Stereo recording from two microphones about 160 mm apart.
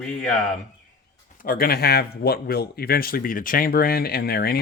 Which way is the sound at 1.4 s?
70° left (ahead or behind).